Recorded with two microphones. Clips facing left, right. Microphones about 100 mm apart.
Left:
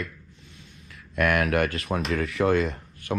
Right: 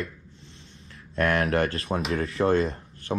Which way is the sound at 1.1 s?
30° right (ahead or behind).